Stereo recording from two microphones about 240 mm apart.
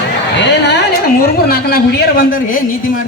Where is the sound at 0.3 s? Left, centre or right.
Left.